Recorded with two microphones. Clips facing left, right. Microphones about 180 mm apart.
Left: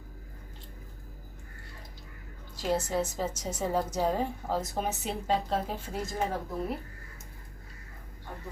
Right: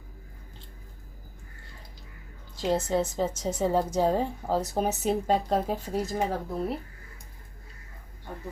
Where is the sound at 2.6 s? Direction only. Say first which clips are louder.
Right 3 dB; 25° right (ahead or behind); by 6.1 s 40° right (ahead or behind).